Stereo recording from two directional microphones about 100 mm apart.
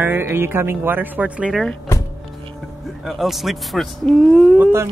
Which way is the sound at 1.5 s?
5° left (ahead or behind).